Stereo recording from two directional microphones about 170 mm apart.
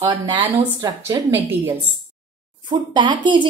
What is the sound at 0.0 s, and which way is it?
Speech, 25° right (ahead or behind).